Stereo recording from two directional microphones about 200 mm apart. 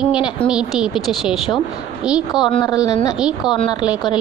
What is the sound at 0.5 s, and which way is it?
Speech, 5° right (ahead or behind).